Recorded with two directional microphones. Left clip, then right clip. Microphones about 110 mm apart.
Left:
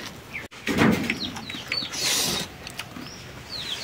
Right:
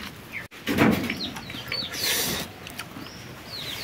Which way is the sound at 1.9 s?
5° right (ahead or behind).